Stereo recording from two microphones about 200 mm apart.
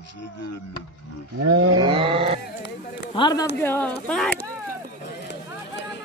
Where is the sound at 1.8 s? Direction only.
25° right (ahead or behind).